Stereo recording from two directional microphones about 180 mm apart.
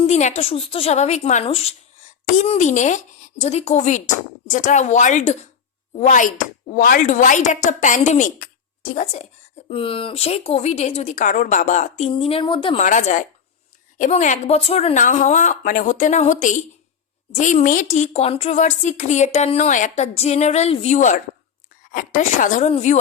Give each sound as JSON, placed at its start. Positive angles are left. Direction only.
{"t": 0.0, "sound": "a woman's voice", "side_deg": 40}
{"t": 9.6, "sound": "a woman's voice", "side_deg": 30}
{"t": 12.8, "sound": "a woman's voice", "side_deg": 45}